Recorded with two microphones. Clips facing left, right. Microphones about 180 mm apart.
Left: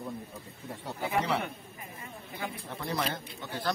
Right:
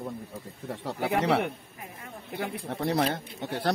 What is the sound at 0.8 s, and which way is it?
Speech, 75° right (ahead or behind).